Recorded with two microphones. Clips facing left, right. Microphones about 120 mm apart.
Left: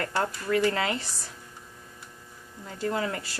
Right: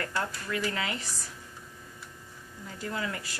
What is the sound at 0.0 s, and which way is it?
Speech, 40° left (ahead or behind).